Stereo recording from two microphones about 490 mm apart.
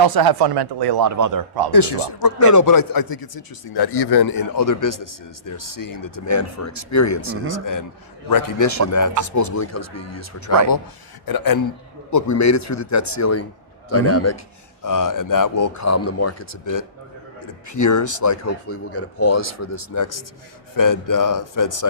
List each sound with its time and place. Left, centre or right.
0.0 s speech: right
1.7 s speech: left
2.4 s speech: left
11.3 s a man's voice: left